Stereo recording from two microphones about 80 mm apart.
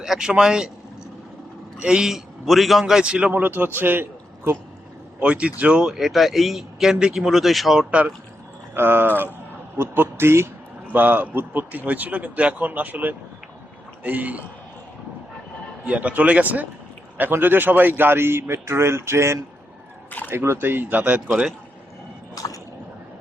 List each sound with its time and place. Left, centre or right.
0.0 s a man's voice: centre
1.8 s a man's voice: centre; by 4.5 s right
5.2 s speech: centre
7.9 s a man's voice: centre
8.7 s a man's voice: right
15.8 s a man's voice: centre; by 19.4 s right
20.1 s a sound: left
20.3 s a man's voice: right
22.4 s a sound: left